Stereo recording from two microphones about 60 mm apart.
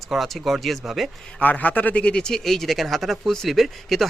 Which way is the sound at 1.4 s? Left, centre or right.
Left.